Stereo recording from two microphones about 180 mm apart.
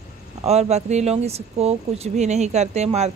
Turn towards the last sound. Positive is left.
turn(degrees=-35)  # may be behind; listen again after turning